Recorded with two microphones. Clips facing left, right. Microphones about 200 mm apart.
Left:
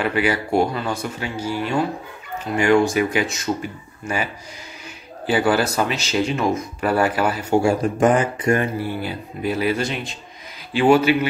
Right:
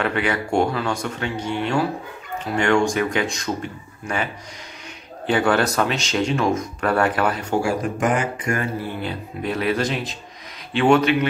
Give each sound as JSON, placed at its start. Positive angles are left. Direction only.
{"t": 0.0, "sound": "speech", "side_deg": 5}
{"t": 7.6, "sound": "speech", "side_deg": 30}
{"t": 9.0, "sound": "speech", "side_deg": 5}